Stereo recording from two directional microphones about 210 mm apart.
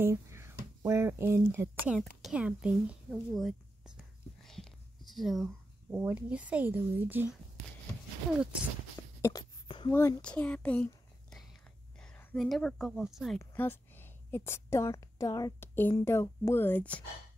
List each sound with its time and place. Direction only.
0.0 s speech: 10° right (ahead or behind)
2.0 s a woman's voice: 5° left (ahead or behind)
2.3 s whispering: 5° right (ahead or behind)
8.9 s a sound: 15° left (ahead or behind)
9.9 s a woman's voice: 10° left (ahead or behind)
13.4 s a woman's voice: 10° left (ahead or behind)